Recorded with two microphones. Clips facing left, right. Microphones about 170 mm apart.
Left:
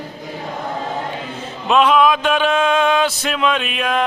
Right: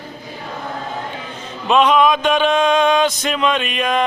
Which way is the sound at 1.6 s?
5° left (ahead or behind).